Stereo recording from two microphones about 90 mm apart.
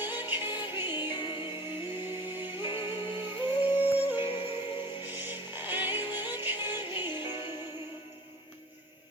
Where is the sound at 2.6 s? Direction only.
70° left (ahead or behind).